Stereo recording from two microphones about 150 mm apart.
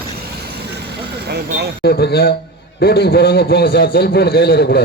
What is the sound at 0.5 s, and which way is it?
Vehicle, 90° right.